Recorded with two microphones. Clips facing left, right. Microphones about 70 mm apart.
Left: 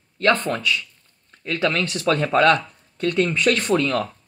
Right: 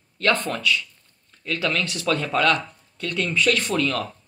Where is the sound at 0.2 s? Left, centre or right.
Left.